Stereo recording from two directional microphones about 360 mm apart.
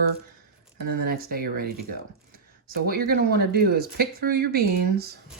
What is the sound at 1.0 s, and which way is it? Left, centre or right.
Speech, right.